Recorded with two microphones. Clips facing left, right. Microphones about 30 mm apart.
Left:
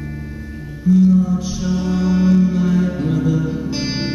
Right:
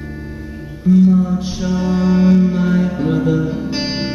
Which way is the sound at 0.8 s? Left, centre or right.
Right.